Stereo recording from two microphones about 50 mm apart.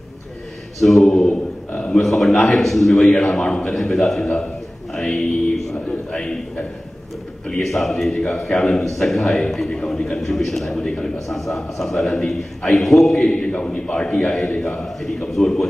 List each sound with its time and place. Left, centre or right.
0.7 s a man's voice: centre
7.6 s a man's voice: centre
13.2 s a man's voice: centre